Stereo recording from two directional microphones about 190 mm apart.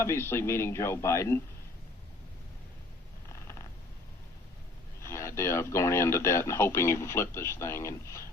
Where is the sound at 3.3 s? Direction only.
15° left (ahead or behind).